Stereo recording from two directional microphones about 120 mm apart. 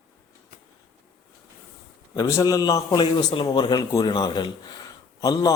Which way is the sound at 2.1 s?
30° left (ahead or behind).